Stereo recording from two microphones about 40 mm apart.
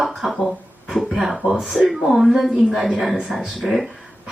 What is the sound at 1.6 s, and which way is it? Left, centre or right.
Speech, centre.